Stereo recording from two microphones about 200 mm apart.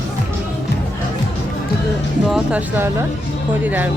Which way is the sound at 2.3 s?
5° right (ahead or behind).